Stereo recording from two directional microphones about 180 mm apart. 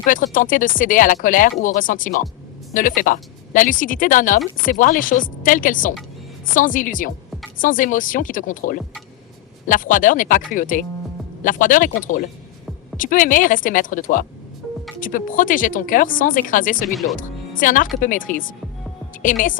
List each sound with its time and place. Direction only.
0.0 s speech: 50° left (ahead or behind)
16.9 s speech: centre (ahead or behind)
17.2 s speech: 50° left (ahead or behind)